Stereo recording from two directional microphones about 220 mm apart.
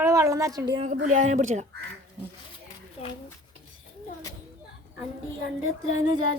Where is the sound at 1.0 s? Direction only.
35° right (ahead or behind).